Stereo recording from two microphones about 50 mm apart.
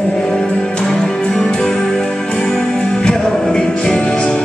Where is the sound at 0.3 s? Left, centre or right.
Left.